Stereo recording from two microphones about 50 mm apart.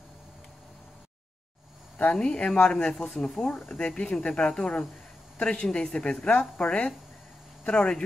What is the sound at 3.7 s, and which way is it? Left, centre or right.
Speech, left.